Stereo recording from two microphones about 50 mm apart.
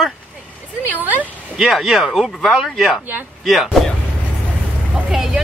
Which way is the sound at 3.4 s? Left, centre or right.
Centre.